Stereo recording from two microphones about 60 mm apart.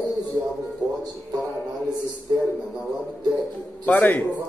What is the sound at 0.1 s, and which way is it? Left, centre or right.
Music, right.